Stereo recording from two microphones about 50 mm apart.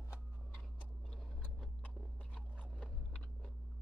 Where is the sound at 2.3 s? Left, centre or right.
Left.